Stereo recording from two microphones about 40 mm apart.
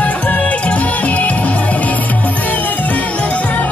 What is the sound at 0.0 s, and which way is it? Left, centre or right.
Music, left.